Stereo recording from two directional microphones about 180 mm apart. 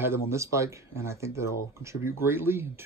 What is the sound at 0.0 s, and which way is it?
Speech, 15° right (ahead or behind).